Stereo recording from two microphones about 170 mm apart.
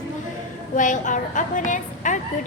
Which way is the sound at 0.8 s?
50° left (ahead or behind).